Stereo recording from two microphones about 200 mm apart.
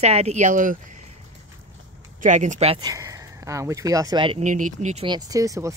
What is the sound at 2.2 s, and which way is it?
Speech, 35° right (ahead or behind).